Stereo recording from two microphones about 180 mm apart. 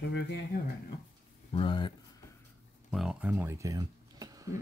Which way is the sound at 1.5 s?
30° left (ahead or behind).